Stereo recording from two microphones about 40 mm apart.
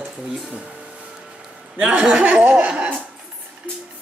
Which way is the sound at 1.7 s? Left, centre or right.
Right.